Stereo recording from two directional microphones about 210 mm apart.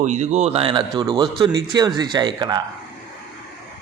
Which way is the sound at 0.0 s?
35° right (ahead or behind).